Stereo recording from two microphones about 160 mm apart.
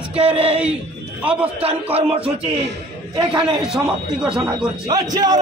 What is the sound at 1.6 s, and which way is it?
Speech, 40° right (ahead or behind).